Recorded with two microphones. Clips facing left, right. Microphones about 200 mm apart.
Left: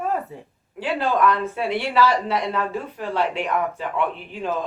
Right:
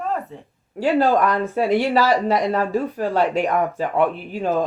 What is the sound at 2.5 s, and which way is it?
Speech, 45° right (ahead or behind).